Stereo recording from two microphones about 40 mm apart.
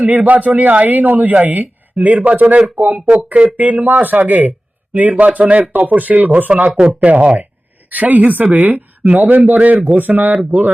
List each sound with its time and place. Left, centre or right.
0.0 s speech: right